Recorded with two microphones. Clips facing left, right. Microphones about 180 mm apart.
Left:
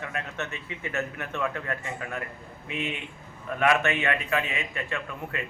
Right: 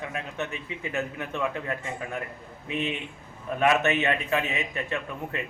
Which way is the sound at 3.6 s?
20° right (ahead or behind).